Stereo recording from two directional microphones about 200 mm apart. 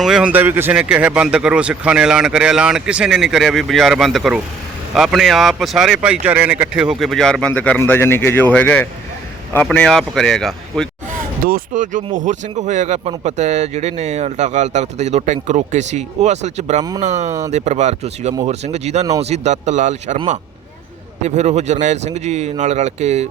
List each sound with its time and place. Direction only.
0.0 s speech: 5° right (ahead or behind)
11.4 s speech: 45° right (ahead or behind)